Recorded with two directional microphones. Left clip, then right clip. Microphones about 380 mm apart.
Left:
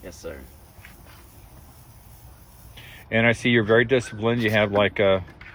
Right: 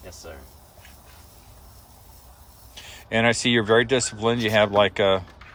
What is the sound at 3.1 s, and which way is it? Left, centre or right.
Speech, centre.